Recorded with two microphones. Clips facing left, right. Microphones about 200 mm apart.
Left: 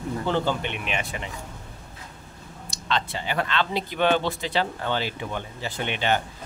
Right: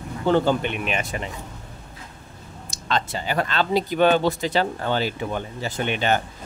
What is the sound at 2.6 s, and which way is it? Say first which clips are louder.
Speech: right 2 dB; 50° right (ahead or behind).